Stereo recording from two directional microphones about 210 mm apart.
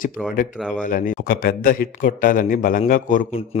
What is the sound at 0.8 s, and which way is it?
Speech, 40° left (ahead or behind).